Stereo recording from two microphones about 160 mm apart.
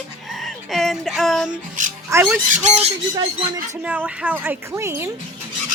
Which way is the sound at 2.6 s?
40° right (ahead or behind).